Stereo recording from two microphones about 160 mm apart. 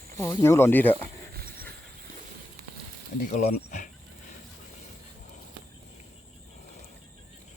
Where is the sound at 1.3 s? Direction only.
70° right (ahead or behind).